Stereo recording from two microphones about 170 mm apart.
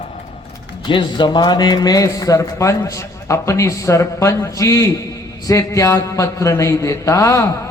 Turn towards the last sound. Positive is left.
turn(degrees=20)  # may be behind; listen again after turning